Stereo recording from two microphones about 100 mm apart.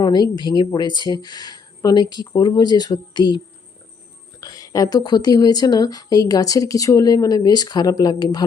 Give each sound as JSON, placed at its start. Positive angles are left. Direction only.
{"t": 0.0, "sound": "speech", "side_deg": 45}